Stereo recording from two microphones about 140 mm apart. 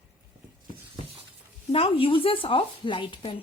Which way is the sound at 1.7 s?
45° left (ahead or behind).